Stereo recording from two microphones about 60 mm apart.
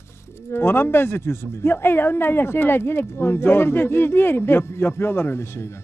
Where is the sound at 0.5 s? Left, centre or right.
Left.